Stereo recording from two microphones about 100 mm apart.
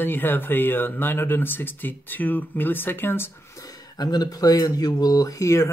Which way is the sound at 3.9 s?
45° left (ahead or behind).